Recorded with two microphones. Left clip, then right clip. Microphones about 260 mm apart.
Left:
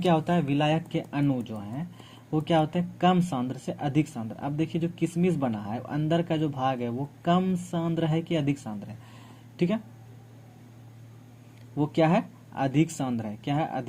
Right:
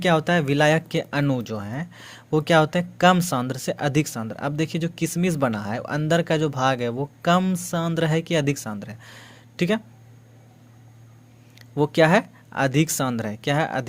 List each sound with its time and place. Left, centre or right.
0.0 s speech: right
11.8 s speech: right